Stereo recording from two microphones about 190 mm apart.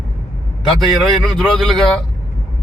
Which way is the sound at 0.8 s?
Centre (ahead or behind).